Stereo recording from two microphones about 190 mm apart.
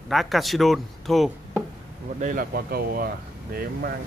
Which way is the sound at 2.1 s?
45° right (ahead or behind).